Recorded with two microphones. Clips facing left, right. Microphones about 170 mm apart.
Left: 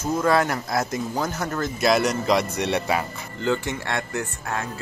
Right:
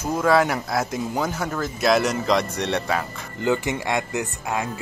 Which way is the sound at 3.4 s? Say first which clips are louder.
Right 2 dB; 15° right (ahead or behind).